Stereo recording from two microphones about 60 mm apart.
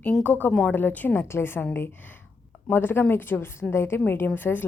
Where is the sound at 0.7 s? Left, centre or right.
Left.